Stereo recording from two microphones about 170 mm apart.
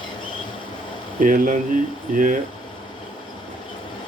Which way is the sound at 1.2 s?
55° right (ahead or behind).